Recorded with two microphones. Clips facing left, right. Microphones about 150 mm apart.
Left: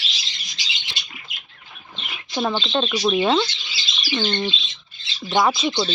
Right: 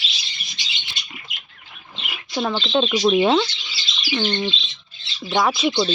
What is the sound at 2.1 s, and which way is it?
Speech, centre (ahead or behind).